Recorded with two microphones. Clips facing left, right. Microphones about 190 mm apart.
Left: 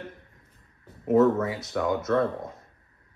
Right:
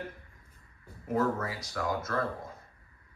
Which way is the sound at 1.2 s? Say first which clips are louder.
Left 9 dB; 25° left (ahead or behind).